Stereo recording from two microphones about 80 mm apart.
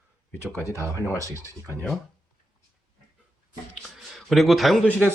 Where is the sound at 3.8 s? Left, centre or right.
Centre.